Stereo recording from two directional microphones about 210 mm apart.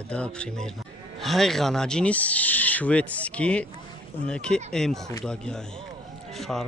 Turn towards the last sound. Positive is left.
turn(degrees=0)  # may be behind; listen again after turning